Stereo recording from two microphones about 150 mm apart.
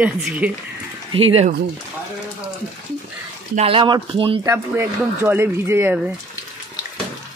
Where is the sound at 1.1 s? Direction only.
35° right (ahead or behind).